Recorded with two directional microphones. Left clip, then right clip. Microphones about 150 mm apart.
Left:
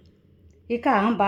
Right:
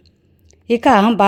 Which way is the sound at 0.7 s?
40° right (ahead or behind).